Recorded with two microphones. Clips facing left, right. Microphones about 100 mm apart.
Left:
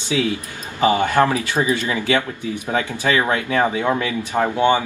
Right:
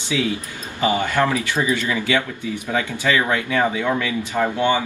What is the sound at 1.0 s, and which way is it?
Speech, 50° left (ahead or behind).